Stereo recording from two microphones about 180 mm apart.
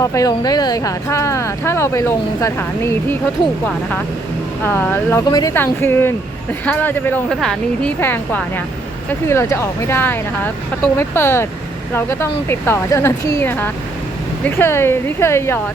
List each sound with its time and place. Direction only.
0.0 s speech: 20° left (ahead or behind)
4.6 s speech: 10° left (ahead or behind)